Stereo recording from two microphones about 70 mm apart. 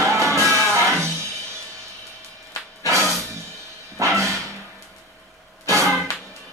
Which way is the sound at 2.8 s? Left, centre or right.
Right.